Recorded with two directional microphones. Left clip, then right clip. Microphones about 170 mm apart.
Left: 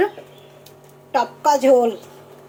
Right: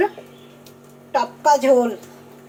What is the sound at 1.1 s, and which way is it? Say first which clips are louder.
Speech: right 1 dB; 15° left (ahead or behind).